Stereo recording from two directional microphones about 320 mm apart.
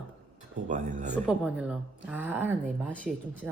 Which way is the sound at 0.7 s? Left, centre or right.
Right.